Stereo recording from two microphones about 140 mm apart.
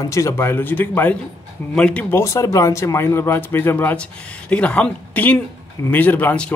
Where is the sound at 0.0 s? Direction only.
25° left (ahead or behind).